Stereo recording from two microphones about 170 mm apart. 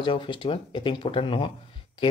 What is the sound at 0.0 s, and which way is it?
Speech, 30° left (ahead or behind).